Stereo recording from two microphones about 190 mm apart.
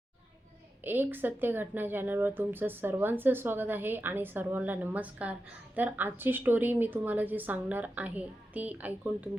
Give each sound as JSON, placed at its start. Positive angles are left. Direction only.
{"t": 0.9, "sound": "speech", "side_deg": -10}